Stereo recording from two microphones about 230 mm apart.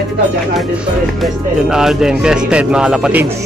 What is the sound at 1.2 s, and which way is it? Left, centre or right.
Speech, centre.